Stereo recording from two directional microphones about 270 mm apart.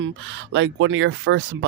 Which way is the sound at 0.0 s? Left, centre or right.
Right.